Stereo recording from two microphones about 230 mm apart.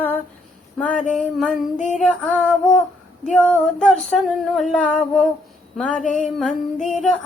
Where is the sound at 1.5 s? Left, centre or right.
Left.